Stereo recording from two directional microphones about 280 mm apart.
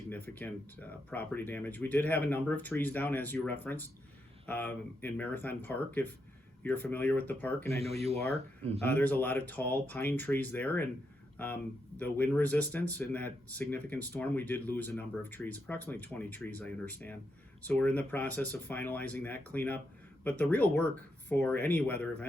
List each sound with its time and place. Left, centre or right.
0.1 s speech: centre
7.8 s speech: right
8.9 s speech: centre